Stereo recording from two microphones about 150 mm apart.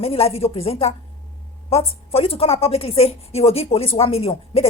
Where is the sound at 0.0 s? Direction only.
40° left (ahead or behind).